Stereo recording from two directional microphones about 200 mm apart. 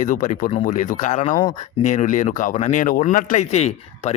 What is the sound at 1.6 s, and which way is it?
Speech, 35° left (ahead or behind).